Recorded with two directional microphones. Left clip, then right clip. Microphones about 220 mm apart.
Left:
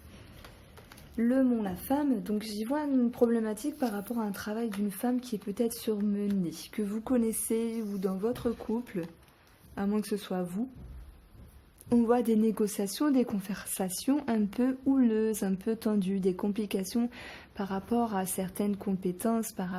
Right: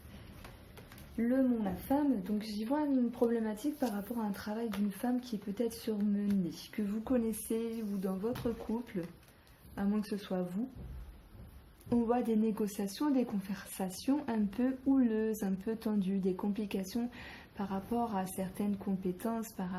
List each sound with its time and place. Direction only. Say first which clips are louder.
1.1 s speech: left 4 dB; 45° left (ahead or behind)
9.7 s speech: left 5 dB; 50° left (ahead or behind)
11.9 s speech: left 6 dB; 50° left (ahead or behind)